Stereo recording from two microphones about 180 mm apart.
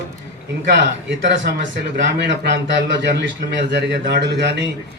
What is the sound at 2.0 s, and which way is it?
Speech, 70° right (ahead or behind).